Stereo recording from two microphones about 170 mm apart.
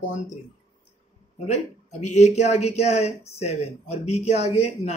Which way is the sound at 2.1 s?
40° left (ahead or behind).